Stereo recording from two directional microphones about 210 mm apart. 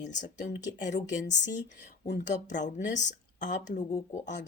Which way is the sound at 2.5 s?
35° left (ahead or behind).